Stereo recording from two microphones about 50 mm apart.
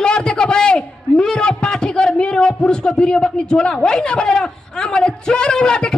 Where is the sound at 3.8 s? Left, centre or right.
Centre.